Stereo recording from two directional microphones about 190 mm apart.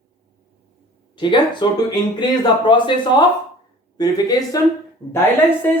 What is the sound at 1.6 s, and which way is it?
Speech, 25° left (ahead or behind).